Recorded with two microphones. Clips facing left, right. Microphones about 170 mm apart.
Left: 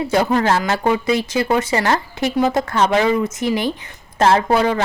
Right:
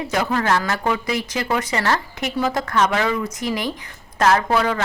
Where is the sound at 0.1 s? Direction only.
25° left (ahead or behind).